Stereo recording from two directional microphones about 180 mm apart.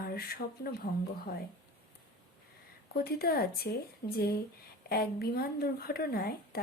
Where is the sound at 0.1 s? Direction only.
60° left (ahead or behind).